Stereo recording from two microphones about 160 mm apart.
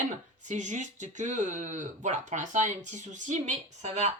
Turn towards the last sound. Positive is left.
turn(degrees=-45)  # may be behind; listen again after turning